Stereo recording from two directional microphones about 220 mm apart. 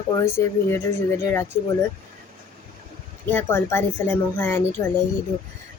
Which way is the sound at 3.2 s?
10° left (ahead or behind).